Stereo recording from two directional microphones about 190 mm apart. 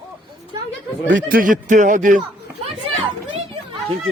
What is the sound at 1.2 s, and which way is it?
Speech, 45° right (ahead or behind).